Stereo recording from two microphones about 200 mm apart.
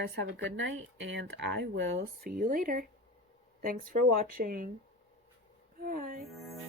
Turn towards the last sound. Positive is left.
turn(degrees=-45)  # may be behind; listen again after turning